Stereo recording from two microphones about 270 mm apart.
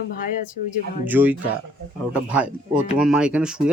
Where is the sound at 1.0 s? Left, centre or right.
Centre.